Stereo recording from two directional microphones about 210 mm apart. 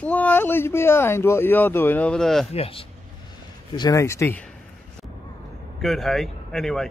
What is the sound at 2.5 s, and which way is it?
Speech, 25° left (ahead or behind).